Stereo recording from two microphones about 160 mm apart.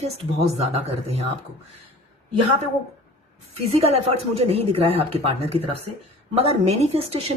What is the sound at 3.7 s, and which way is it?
Speech, 40° right (ahead or behind).